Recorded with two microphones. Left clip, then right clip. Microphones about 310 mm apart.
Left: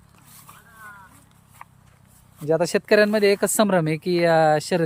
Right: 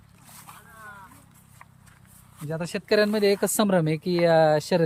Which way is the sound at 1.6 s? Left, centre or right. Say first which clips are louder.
Left 7 dB; centre.